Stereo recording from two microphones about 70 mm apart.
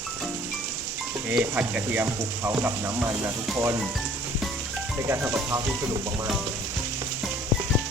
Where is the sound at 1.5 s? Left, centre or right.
Right.